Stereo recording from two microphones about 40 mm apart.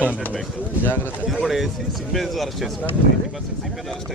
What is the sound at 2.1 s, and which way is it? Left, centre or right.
Speech, centre.